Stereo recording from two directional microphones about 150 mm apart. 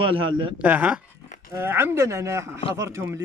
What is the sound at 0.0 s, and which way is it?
Speech, 35° right (ahead or behind).